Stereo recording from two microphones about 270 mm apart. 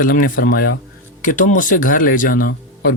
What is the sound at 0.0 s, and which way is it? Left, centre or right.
Speech, left.